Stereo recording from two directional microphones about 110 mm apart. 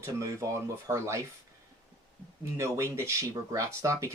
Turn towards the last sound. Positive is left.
turn(degrees=-25)  # may be behind; listen again after turning